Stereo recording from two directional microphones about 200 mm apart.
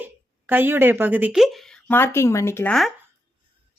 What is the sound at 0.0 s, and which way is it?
A woman's voice, 10° right (ahead or behind).